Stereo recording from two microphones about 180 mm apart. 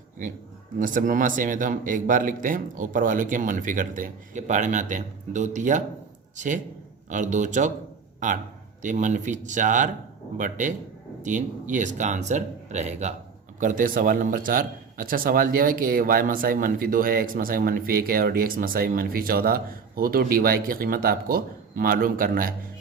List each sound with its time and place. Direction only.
0.8 s speech: 50° right (ahead or behind)